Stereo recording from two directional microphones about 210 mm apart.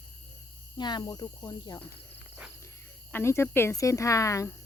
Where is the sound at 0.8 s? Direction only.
20° left (ahead or behind).